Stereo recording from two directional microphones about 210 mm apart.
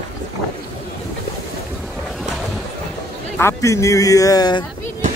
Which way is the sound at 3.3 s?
15° left (ahead or behind).